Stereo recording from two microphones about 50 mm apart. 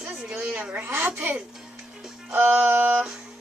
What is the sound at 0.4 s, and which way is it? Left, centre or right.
A woman's voice, right.